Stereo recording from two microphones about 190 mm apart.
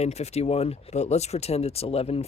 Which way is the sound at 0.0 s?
35° left (ahead or behind).